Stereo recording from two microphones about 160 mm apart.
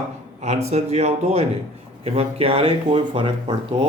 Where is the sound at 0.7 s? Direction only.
40° right (ahead or behind).